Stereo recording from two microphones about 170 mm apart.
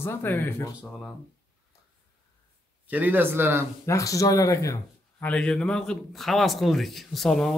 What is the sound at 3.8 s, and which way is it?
Speech, 20° left (ahead or behind).